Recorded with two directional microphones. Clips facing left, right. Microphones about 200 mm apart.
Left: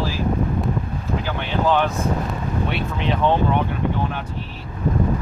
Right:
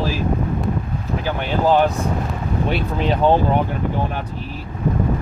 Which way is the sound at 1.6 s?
40° right (ahead or behind).